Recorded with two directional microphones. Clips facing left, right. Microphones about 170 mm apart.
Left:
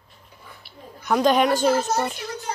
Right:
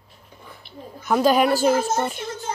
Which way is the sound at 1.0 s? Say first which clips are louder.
Right 1 dB; 5° right (ahead or behind).